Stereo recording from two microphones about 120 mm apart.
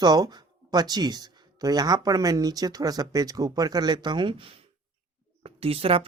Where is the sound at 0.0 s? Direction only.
35° right (ahead or behind).